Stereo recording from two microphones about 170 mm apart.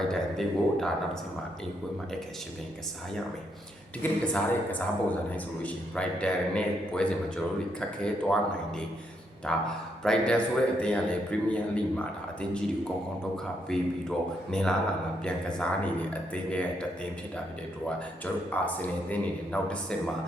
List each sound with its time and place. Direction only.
0.1 s a man's voice: 5° left (ahead or behind)
4.2 s a man's voice: 10° left (ahead or behind)
9.5 s a man's voice: 5° left (ahead or behind)
13.7 s a man's voice: 5° left (ahead or behind)
18.5 s a man's voice: 10° left (ahead or behind)